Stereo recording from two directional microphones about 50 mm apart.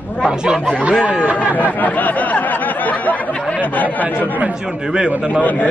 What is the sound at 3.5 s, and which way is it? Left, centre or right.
Speech, left.